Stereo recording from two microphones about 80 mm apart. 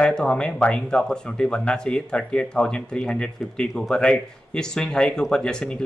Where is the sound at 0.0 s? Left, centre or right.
Centre.